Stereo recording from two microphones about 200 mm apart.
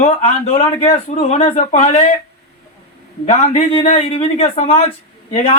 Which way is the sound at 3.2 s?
35° left (ahead or behind).